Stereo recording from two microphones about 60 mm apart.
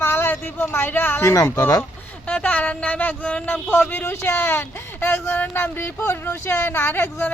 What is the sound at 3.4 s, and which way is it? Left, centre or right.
Speech, left.